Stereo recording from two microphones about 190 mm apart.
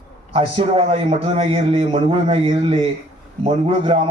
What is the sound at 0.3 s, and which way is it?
A man's voice, 30° right (ahead or behind).